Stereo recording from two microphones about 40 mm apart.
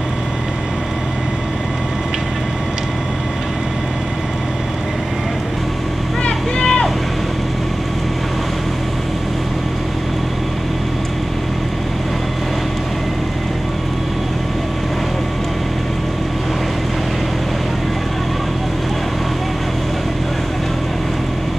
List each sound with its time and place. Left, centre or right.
6.6 s vehicle: centre